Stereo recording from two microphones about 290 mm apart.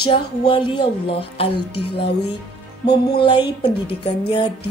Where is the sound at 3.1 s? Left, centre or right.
Centre.